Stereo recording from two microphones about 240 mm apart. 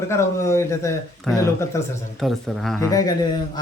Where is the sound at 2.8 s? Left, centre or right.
Centre.